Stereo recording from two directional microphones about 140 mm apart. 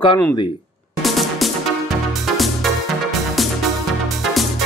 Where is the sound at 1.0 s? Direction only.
Centre (ahead or behind).